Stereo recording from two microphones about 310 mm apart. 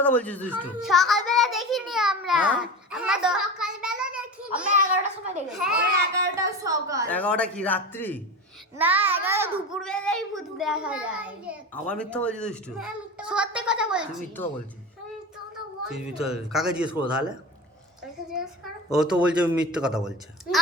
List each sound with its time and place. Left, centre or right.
0.0 s a child's voice: centre
0.6 s child singing: centre
4.8 s a sound: right
6.2 s a sound: centre
7.1 s a child's voice: centre
8.8 s a child's voice: centre
15.9 s a child's voice: centre
18.9 s a child's voice: centre